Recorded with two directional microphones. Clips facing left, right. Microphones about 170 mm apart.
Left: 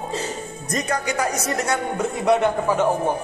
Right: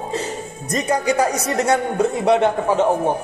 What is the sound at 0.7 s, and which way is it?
Speech, 25° right (ahead or behind).